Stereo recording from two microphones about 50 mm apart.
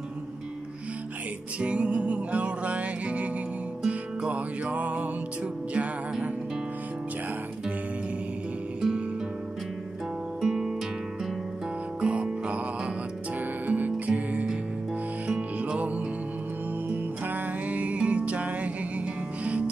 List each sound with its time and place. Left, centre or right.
1.6 s music: right
10.4 s music: centre
12.0 s music: right
13.7 s music: right
15.5 s music: right